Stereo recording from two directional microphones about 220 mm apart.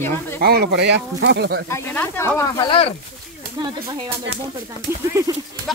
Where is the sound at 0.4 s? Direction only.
45° right (ahead or behind).